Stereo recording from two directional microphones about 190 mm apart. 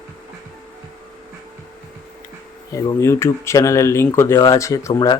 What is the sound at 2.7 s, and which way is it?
Speech, 15° left (ahead or behind).